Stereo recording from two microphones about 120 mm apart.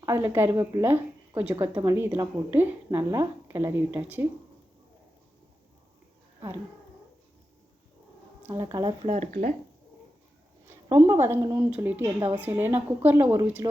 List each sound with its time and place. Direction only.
0.0 s a woman's voice: 20° right (ahead or behind)
8.4 s a woman's voice: 25° right (ahead or behind)
9.0 s speech: 85° right
11.0 s a woman's voice: 20° right (ahead or behind)